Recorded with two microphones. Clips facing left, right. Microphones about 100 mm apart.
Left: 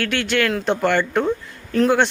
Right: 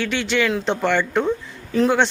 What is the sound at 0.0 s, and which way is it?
Speech, centre (ahead or behind).